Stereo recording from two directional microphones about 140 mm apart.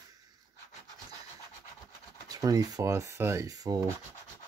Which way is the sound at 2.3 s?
25° right (ahead or behind).